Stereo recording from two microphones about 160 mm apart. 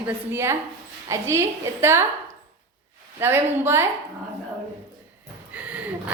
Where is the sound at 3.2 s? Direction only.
15° right (ahead or behind).